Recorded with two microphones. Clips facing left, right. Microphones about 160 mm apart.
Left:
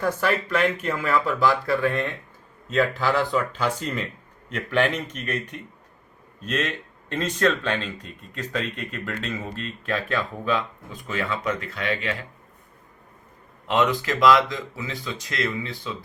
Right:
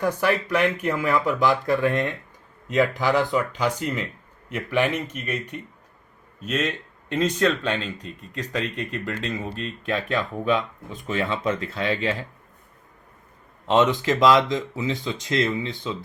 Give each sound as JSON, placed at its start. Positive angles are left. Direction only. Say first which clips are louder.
{"t": 0.0, "sound": "speech", "louder": "right 1 dB", "side_deg": -15}
{"t": 13.7, "sound": "speech", "louder": "right 3 dB", "side_deg": -25}